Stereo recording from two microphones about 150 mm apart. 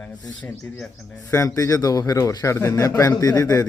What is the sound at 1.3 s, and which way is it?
A man's voice, 20° left (ahead or behind).